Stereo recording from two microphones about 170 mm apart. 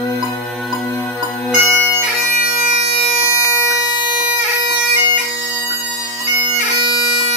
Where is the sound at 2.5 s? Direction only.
40° right (ahead or behind).